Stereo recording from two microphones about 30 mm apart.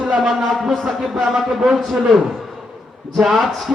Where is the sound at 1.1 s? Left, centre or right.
Centre.